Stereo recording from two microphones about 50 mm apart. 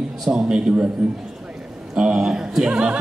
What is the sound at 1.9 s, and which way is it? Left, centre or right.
A man's voice, centre.